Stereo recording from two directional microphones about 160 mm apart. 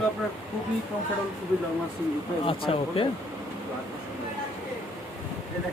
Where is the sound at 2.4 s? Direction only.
35° left (ahead or behind).